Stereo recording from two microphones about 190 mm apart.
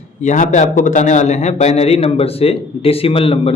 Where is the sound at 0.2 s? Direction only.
40° left (ahead or behind).